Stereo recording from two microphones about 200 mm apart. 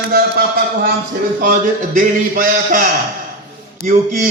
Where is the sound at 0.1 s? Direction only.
50° right (ahead or behind).